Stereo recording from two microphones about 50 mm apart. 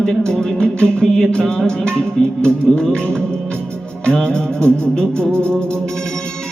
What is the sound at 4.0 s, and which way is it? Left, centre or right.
Music, left.